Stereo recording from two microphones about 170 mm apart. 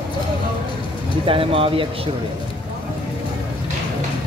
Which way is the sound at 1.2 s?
30° right (ahead or behind).